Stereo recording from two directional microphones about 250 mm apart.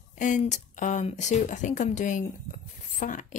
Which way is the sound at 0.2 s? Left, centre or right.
Left.